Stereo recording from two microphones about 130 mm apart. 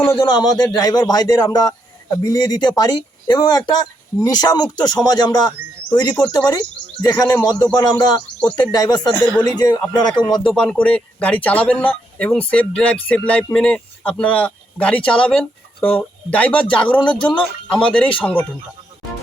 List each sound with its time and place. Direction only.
0.2 s a man's voice: 30° left (ahead or behind)
10.4 s speech: 5° left (ahead or behind)